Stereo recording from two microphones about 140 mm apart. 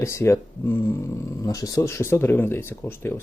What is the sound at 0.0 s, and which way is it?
Speech, 20° left (ahead or behind).